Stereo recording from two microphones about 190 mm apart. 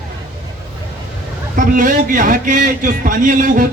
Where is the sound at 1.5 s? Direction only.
45° right (ahead or behind).